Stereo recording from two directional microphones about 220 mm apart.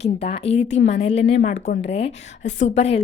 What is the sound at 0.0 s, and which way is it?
A woman's voice, 30° left (ahead or behind).